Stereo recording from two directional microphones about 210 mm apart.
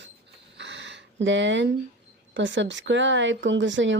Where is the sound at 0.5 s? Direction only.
60° right (ahead or behind).